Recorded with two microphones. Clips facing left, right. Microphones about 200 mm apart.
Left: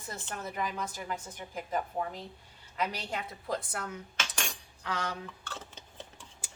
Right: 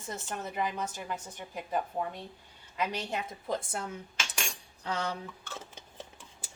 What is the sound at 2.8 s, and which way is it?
Speech, 20° right (ahead or behind).